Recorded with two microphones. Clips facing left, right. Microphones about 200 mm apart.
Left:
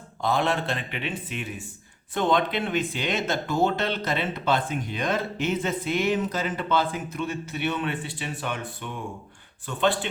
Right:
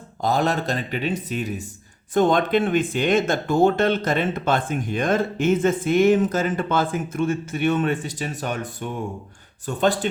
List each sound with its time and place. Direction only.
0.2 s speech: 40° right (ahead or behind)